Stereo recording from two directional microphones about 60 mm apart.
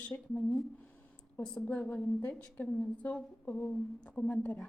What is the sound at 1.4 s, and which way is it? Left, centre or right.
Speech, left.